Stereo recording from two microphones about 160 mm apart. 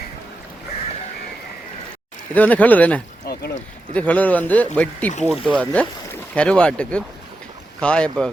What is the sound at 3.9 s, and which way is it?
Speech, 10° left (ahead or behind).